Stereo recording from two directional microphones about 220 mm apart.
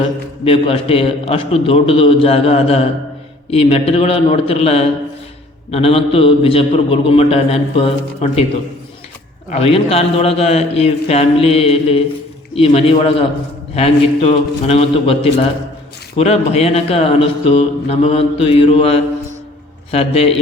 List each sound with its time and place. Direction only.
0.4 s speech: 25° left (ahead or behind)
9.5 s speech: 25° left (ahead or behind)